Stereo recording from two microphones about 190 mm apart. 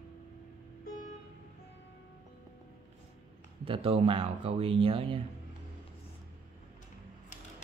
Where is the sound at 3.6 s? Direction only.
30° right (ahead or behind).